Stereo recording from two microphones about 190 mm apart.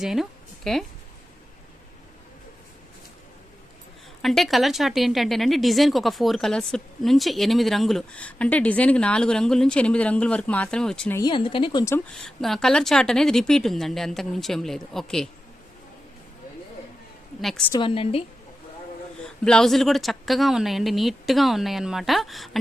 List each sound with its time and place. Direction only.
0.0 s a woman's voice: centre (ahead or behind)
4.2 s a woman's voice: centre (ahead or behind)
11.2 s speech: 25° left (ahead or behind)
12.1 s a woman's voice: centre (ahead or behind)
17.7 s speech: 25° left (ahead or behind)
19.5 s a woman's voice: 5° left (ahead or behind)